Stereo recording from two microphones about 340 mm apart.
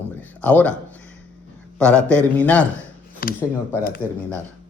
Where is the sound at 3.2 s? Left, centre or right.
Left.